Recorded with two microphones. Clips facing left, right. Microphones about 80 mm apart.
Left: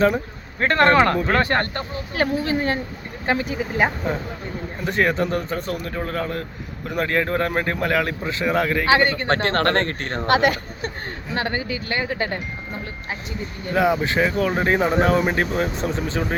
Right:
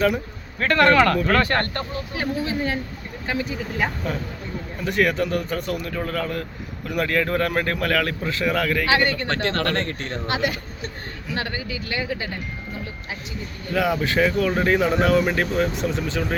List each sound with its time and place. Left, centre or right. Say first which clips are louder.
0.6 s speech: left 1 dB; left
2.1 s speech: left 4 dB; left
4.0 s speech: left 2 dB; left
11.3 s speech: left 3 dB; left
13.7 s speech: left 2 dB; left